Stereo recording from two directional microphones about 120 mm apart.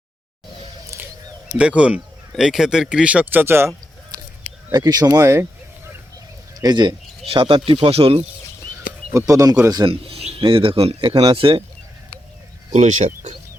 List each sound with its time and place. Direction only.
1.5 s speech: 10° right (ahead or behind)
4.7 s speech: 30° right (ahead or behind)
6.6 s speech: 35° right (ahead or behind)
9.1 s speech: 30° right (ahead or behind)
9.8 s speech: 50° right (ahead or behind)
12.7 s speech: 75° right (ahead or behind)